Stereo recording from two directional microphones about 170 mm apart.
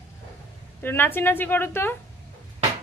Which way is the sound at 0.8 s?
10° left (ahead or behind).